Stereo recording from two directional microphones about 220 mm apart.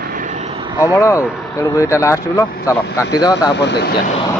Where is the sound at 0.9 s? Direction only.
15° left (ahead or behind).